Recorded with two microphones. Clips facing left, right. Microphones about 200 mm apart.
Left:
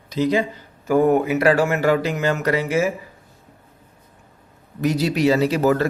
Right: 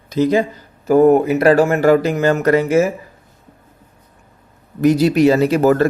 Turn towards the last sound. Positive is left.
turn(degrees=-50)  # may be behind; listen again after turning